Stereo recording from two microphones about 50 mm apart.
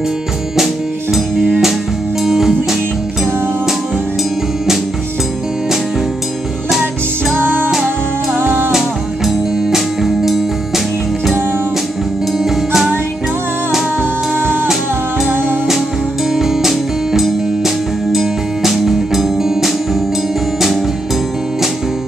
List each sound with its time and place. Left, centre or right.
2.2 s music: centre
7.3 s music: right
8.7 s music: centre
12.4 s music: centre
15.2 s music: right
16.3 s music: centre